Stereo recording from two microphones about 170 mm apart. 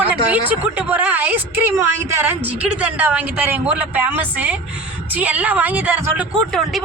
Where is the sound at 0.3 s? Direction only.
10° right (ahead or behind).